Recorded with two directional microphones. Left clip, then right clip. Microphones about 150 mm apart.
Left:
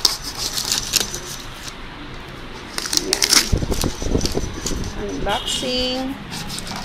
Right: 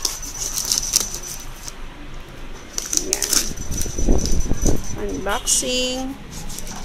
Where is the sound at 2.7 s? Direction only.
10° left (ahead or behind).